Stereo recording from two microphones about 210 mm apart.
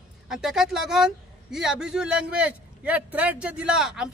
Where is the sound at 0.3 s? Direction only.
Centre (ahead or behind).